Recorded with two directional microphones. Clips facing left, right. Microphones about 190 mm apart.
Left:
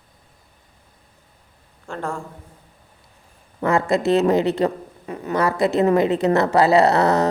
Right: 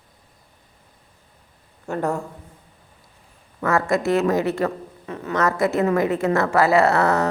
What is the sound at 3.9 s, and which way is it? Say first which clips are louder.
Speech: left 3 dB; 20° left (ahead or behind).